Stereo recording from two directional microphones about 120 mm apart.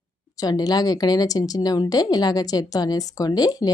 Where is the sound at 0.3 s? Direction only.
30° left (ahead or behind).